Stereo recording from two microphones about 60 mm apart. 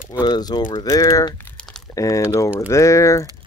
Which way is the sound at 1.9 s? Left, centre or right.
Left.